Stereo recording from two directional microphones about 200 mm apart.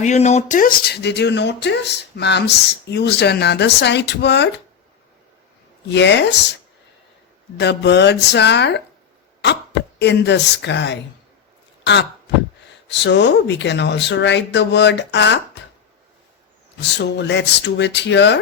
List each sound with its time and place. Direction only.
0.0 s speech: 35° left (ahead or behind); by 4.6 s 60° left (ahead or behind)
5.9 s speech: 60° left (ahead or behind)
7.6 s speech: 60° left (ahead or behind)
10.0 s speech: 60° left (ahead or behind)
16.8 s speech: 60° left (ahead or behind)